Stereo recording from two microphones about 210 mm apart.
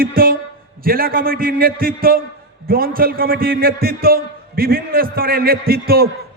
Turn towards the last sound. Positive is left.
turn(degrees=-45)  # may be behind; listen again after turning